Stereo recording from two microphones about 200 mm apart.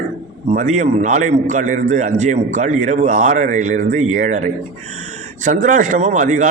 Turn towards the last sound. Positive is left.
turn(degrees=-35)  # may be behind; listen again after turning